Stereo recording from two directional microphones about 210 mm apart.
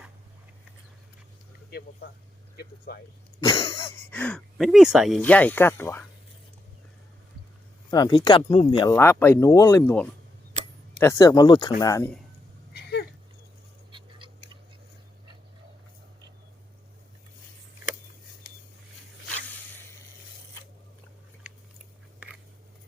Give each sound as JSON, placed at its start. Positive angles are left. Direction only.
{"t": 2.6, "sound": "speech", "side_deg": 45}
{"t": 3.4, "sound": "speech", "side_deg": 15}
{"t": 7.9, "sound": "speech", "side_deg": 20}
{"t": 12.7, "sound": "a sound", "side_deg": 50}